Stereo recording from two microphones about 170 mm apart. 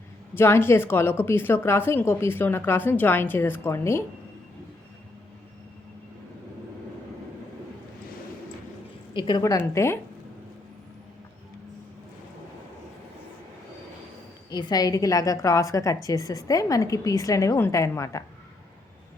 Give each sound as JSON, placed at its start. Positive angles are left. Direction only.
{"t": 0.3, "sound": "a woman's voice", "side_deg": 15}
{"t": 9.1, "sound": "a woman's voice", "side_deg": 25}
{"t": 14.5, "sound": "a woman's voice", "side_deg": 25}